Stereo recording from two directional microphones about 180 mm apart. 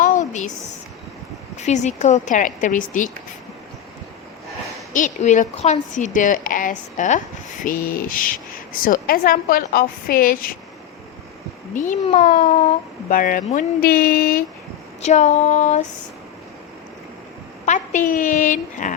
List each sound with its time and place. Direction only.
0.0 s a sound: 45° left (ahead or behind)
1.5 s speech: 40° left (ahead or behind)
4.9 s speech: 45° left (ahead or behind)
11.7 s speech: 45° left (ahead or behind)
13.1 s speech: 50° left (ahead or behind)
15.0 s female singing: 40° left (ahead or behind)
17.7 s speech: 45° left (ahead or behind)